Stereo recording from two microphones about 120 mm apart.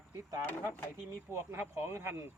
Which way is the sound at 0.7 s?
20° left (ahead or behind).